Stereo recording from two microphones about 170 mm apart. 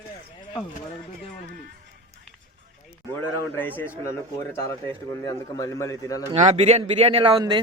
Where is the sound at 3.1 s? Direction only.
15° left (ahead or behind).